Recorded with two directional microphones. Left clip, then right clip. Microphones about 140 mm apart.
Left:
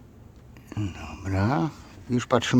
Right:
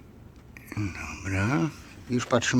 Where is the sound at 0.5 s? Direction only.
20° left (ahead or behind).